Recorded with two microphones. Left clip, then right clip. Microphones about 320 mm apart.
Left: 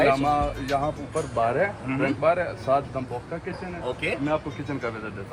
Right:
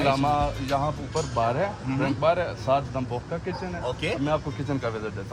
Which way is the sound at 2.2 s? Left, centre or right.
Right.